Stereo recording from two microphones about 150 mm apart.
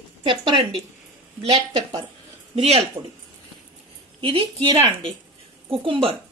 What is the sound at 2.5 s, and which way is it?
Speech, 45° right (ahead or behind).